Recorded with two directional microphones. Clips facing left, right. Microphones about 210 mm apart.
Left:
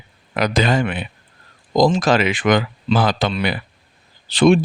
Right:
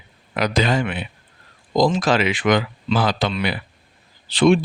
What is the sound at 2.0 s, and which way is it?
Speech, 45° left (ahead or behind).